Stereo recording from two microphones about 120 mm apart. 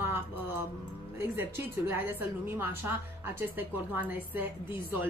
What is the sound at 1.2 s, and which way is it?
A woman's voice, 20° right (ahead or behind).